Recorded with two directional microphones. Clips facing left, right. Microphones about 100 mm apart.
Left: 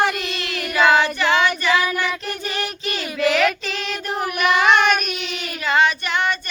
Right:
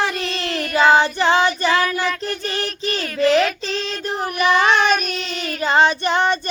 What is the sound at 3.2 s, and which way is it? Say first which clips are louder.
Child singing: right 3 dB; 35° right (ahead or behind).